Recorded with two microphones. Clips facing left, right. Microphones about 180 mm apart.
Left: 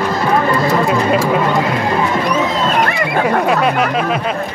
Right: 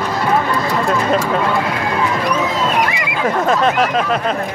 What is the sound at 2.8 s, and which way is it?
Neigh, 60° left (ahead or behind).